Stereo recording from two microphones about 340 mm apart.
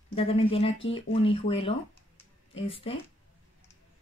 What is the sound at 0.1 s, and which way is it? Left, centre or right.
Speech, centre.